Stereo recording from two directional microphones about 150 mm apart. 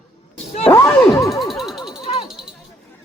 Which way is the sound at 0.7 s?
15° left (ahead or behind).